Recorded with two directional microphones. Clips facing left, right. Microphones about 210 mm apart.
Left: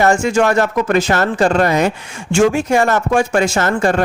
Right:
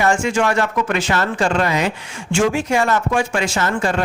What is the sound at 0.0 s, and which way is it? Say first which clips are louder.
Speech: left 4 dB; 40° left (ahead or behind).